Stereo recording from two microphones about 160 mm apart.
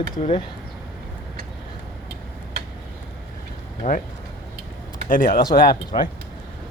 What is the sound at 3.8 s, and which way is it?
Speech, 60° left (ahead or behind).